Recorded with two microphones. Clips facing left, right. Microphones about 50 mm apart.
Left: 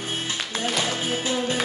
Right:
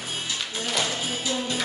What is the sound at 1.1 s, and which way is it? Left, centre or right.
Music, left.